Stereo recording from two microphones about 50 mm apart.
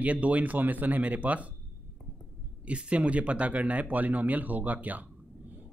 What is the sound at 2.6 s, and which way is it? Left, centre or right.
A man's voice, right.